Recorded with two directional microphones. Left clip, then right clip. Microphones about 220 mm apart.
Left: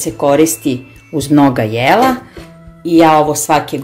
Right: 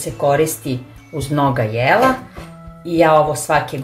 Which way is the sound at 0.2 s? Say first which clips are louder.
Left 5 dB; 35° left (ahead or behind).